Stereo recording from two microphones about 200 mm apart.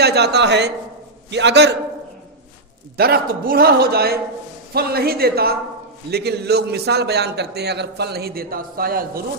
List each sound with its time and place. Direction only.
0.0 s a man's voice: 55° right (ahead or behind)
3.0 s a man's voice: 50° right (ahead or behind)